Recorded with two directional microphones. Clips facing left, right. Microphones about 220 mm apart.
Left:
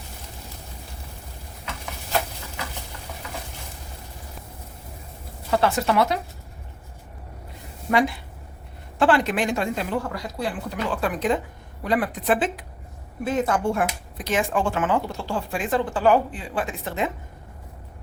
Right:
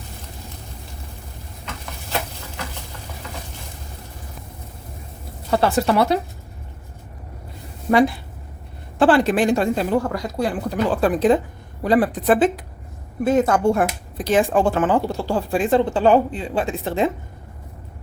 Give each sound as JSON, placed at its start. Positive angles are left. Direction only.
{"t": 5.5, "sound": "speech", "side_deg": -35}
{"t": 7.9, "sound": "a woman's voice", "side_deg": -35}
{"t": 14.2, "sound": "speech", "side_deg": -35}